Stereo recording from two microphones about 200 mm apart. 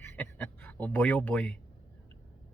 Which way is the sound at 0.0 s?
10° left (ahead or behind).